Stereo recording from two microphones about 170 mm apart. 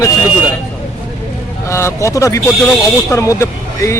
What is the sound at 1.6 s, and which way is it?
Speech, 15° left (ahead or behind).